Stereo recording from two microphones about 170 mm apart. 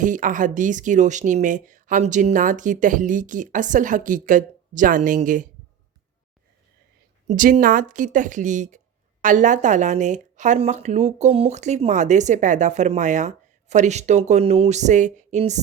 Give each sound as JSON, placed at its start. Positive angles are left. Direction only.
{"t": 0.0, "sound": "speech", "side_deg": -50}
{"t": 7.3, "sound": "speech", "side_deg": -50}